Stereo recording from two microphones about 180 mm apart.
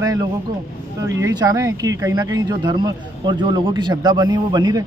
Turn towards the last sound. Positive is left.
turn(degrees=-20)  # may be behind; listen again after turning